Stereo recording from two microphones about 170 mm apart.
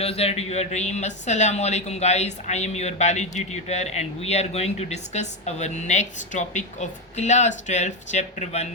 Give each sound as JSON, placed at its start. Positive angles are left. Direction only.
{"t": 0.0, "sound": "speech", "side_deg": 35}